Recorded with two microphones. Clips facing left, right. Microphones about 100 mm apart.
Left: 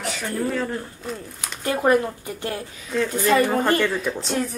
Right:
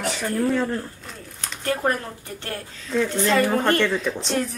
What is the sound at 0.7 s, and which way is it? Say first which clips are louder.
A woman's voice: even; 10° left (ahead or behind).